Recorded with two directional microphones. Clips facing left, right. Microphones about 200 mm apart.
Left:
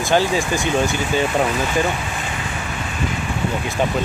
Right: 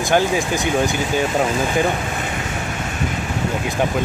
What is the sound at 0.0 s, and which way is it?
Speech, 15° right (ahead or behind).